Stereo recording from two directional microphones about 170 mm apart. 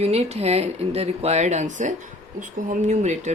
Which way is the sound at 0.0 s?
40° right (ahead or behind).